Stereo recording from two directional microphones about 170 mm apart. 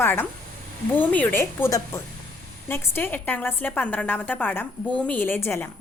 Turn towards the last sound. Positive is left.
turn(degrees=15)  # may be behind; listen again after turning